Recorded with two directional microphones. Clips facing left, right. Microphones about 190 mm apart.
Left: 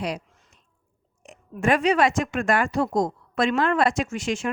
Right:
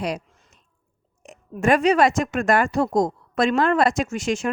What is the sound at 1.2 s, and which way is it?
A woman's voice, 40° right (ahead or behind).